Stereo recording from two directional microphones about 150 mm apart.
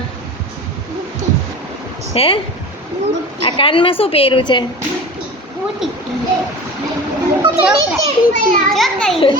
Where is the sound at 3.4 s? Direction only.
35° left (ahead or behind).